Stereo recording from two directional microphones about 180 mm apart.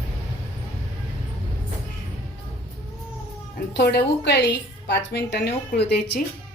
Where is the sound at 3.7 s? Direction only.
70° left (ahead or behind).